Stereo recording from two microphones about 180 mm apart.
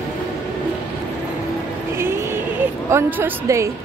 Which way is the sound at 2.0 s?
15° right (ahead or behind).